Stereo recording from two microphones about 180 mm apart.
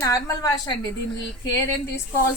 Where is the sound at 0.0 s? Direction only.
20° left (ahead or behind).